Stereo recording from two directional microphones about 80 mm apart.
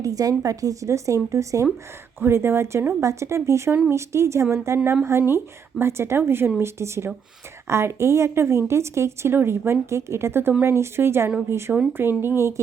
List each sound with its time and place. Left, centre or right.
0.0 s a woman's voice: right
2.2 s a woman's voice: right